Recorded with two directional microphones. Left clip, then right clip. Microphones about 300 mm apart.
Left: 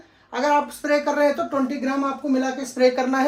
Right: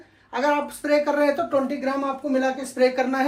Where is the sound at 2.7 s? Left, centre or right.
Centre.